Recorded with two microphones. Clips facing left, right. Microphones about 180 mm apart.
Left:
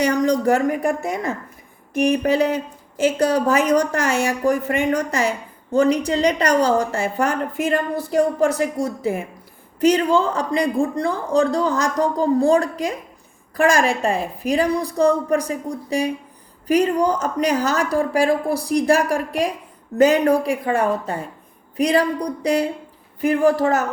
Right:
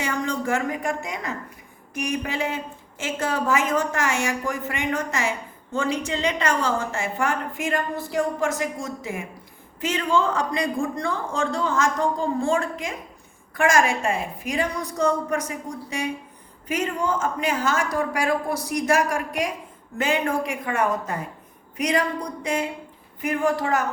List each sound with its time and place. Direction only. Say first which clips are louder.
0.0 s speech: left 9 dB; 40° left (ahead or behind)